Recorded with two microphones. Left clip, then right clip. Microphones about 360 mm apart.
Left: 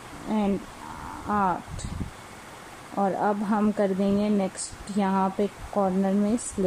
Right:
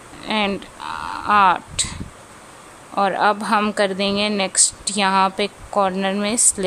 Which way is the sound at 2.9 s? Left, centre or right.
Right.